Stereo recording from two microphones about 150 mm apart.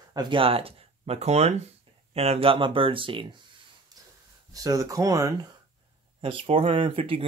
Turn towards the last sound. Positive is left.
turn(degrees=-35)  # may be behind; listen again after turning